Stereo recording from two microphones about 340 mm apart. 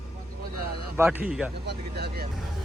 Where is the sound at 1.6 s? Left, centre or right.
Right.